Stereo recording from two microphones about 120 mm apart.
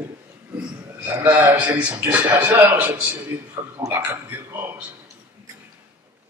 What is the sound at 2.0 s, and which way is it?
A man's voice, 15° right (ahead or behind).